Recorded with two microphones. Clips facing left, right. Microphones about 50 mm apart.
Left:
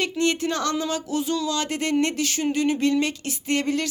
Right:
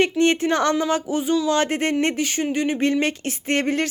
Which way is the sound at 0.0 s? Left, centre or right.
Right.